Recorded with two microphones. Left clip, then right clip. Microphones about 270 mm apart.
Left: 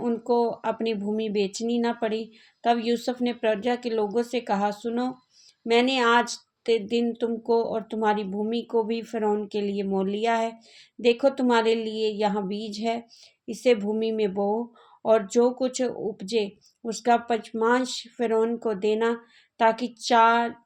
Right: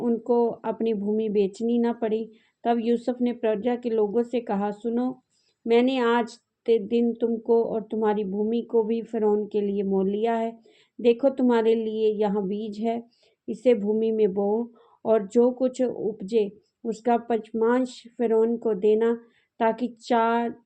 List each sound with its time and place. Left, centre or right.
0.0 s speech: centre